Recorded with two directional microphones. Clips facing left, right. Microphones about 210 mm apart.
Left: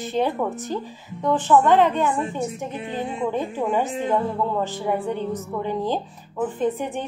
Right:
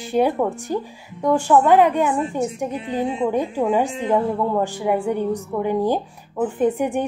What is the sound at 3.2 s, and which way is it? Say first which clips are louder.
A woman's voice: right 2 dB; 15° right (ahead or behind).